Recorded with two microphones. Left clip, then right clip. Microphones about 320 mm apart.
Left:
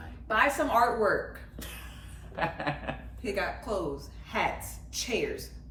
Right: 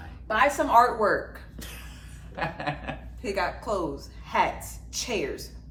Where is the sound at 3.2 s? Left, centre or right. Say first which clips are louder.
Right 4 dB; centre.